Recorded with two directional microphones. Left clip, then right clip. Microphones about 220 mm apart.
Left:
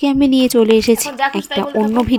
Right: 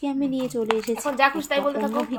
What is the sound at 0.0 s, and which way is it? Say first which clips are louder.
A woman's voice: left 12 dB; 45° left (ahead or behind).